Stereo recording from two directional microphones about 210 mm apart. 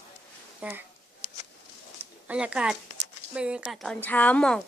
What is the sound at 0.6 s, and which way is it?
Speech, 5° right (ahead or behind).